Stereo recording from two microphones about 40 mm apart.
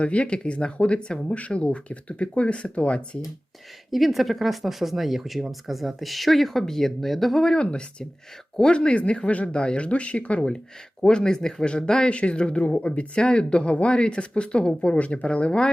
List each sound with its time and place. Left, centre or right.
0.0 s speech: left
3.9 s speech: centre
7.4 s speech: left
11.0 s speech: centre
12.1 s speech: left